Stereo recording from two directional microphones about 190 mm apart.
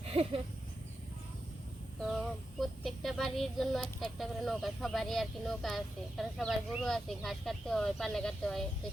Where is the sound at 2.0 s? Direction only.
Centre (ahead or behind).